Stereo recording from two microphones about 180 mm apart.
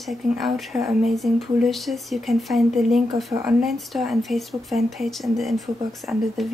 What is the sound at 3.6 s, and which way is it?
Speech, centre (ahead or behind).